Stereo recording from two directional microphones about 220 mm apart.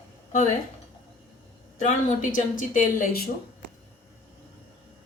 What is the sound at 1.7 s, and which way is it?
A woman's voice, 35° left (ahead or behind).